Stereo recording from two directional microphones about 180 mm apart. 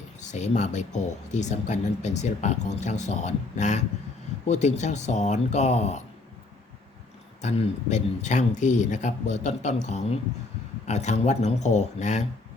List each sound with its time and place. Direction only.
0.2 s speech: 40° left (ahead or behind)
7.4 s speech: 40° left (ahead or behind)